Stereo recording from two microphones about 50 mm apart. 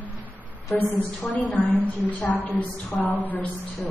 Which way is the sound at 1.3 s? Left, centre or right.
Left.